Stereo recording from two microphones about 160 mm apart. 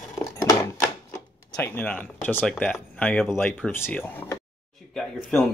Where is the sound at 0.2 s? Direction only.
20° left (ahead or behind).